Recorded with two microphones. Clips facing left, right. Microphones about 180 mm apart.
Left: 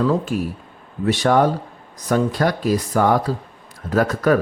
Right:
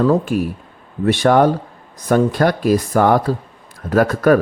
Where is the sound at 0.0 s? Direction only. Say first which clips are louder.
Right 4 dB; 50° right (ahead or behind).